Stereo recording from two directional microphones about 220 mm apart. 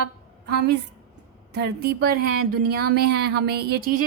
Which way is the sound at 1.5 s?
50° right (ahead or behind).